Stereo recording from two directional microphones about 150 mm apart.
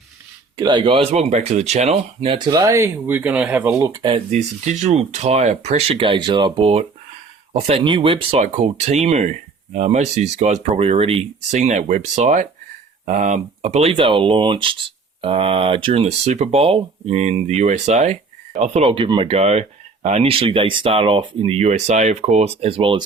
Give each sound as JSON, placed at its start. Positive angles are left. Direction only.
{"t": 0.5, "sound": "speech", "side_deg": -30}
{"t": 2.5, "sound": "speech", "side_deg": -25}
{"t": 4.0, "sound": "speech", "side_deg": -35}
{"t": 4.4, "sound": "speech", "side_deg": -50}
{"t": 11.5, "sound": "speech", "side_deg": -55}